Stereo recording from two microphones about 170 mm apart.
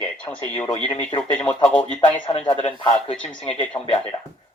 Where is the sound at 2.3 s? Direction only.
35° left (ahead or behind).